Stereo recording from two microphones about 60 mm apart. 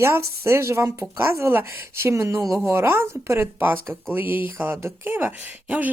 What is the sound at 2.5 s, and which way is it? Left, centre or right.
Speech, right.